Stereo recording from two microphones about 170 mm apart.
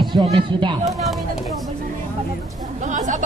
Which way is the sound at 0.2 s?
30° right (ahead or behind).